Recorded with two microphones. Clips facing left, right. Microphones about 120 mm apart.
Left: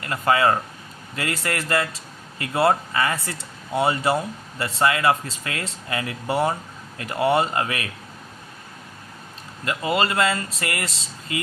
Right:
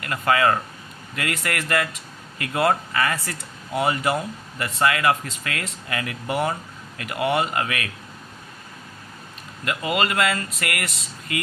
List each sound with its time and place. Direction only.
0.0 s speech: 25° left (ahead or behind)
9.6 s speech: 30° left (ahead or behind)